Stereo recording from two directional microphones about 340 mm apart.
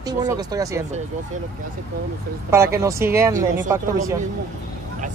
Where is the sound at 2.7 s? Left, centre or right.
Centre.